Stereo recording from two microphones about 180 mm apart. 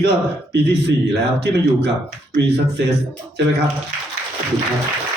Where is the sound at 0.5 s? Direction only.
65° right (ahead or behind).